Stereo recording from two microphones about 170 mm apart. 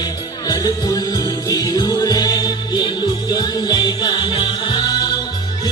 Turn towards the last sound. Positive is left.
turn(degrees=25)  # may be behind; listen again after turning